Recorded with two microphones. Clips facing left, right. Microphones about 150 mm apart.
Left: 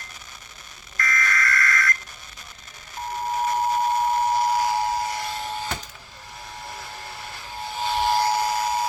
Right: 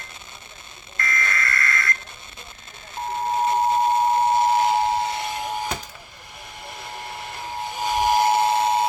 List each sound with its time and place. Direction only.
0.9 s fire alarm: 25° right (ahead or behind)
3.3 s siren: 25° right (ahead or behind)
7.8 s buzzer: 15° right (ahead or behind)